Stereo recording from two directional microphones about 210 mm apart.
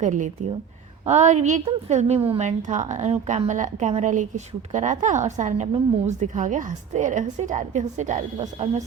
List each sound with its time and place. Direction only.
0.0 s a woman's voice: 35° right (ahead or behind)